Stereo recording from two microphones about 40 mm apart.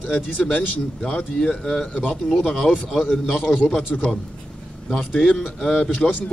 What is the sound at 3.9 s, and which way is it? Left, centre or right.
Speech, centre.